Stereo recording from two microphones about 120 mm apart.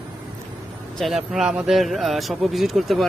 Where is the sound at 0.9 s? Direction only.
Centre (ahead or behind).